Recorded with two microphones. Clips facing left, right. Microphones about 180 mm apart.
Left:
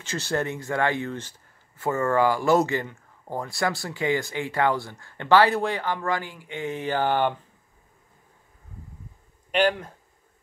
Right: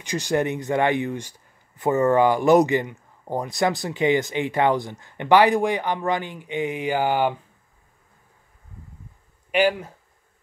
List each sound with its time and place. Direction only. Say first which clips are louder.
0.0 s a man's voice: right 4 dB; 15° right (ahead or behind)
9.5 s speech: right 2 dB; 10° right (ahead or behind)